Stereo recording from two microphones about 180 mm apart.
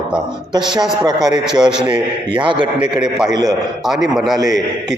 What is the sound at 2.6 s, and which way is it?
Speech, 25° right (ahead or behind).